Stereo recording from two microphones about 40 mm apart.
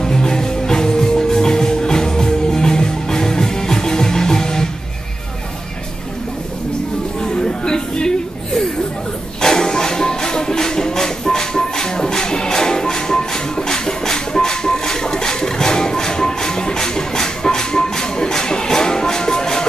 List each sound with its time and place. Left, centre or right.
0.0 s music: centre
7.2 s a sound: centre
9.4 s music: centre